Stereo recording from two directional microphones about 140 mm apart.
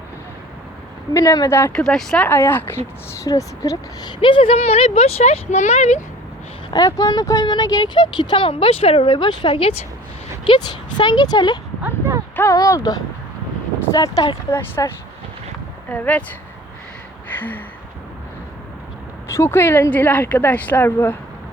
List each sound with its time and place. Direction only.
1.1 s a woman's voice: 25° left (ahead or behind)
1.7 s speech: 5° left (ahead or behind); by 4.1 s 25° left (ahead or behind)
4.2 s speech: 40° left (ahead or behind); by 6.0 s 55° left (ahead or behind)
6.7 s speech: 25° left (ahead or behind)
11.8 s speech: 15° right (ahead or behind)
12.4 s a woman's voice: 25° left (ahead or behind)
17.2 s gasp: 15° left (ahead or behind)
19.3 s speech: 15° left (ahead or behind)